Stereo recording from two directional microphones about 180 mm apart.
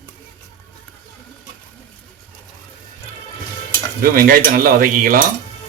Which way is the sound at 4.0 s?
55° right (ahead or behind).